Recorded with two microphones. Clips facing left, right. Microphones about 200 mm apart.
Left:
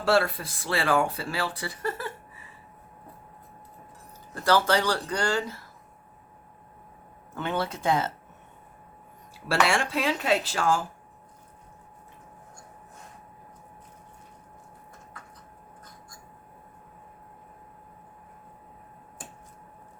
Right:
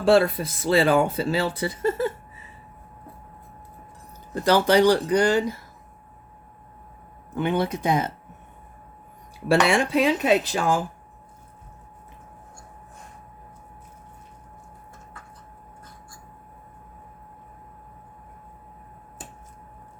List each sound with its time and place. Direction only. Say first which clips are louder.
0.0 s speech: right 6 dB; 20° right (ahead or behind)
4.4 s speech: right 5 dB; 20° right (ahead or behind)
7.3 s speech: right 6 dB; 15° right (ahead or behind)
9.5 s speech: right 6 dB; 20° right (ahead or behind)